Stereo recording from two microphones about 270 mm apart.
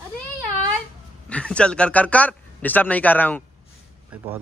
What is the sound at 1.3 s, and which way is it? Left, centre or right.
Speech, centre.